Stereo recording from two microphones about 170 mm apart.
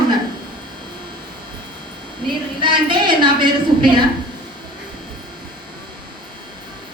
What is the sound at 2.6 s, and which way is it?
A woman's voice, 30° right (ahead or behind).